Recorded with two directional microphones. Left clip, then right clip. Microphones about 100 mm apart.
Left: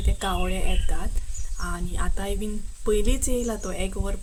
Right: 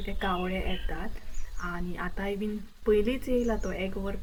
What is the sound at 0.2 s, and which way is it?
A woman's voice, 40° left (ahead or behind).